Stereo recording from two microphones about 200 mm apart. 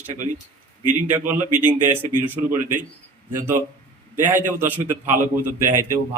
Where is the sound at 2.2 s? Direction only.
10° right (ahead or behind).